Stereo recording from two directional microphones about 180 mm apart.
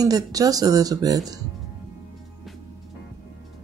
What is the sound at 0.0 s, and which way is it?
Speech, 20° right (ahead or behind).